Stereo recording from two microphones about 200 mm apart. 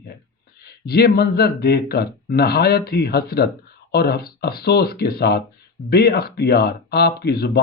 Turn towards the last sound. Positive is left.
turn(degrees=55)  # may be behind; listen again after turning